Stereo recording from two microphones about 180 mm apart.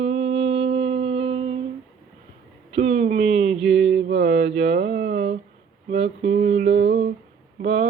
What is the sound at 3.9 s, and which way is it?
Mantra, 75° right (ahead or behind).